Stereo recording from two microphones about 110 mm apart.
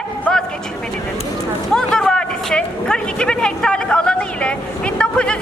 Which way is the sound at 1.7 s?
5° left (ahead or behind).